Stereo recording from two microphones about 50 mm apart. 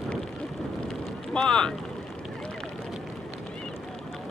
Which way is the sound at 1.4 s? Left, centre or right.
Centre.